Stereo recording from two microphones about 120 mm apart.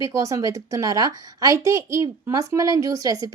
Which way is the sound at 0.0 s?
25° right (ahead or behind).